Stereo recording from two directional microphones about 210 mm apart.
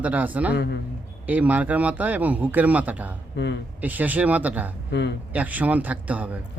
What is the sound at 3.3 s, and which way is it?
Speech, 55° left (ahead or behind).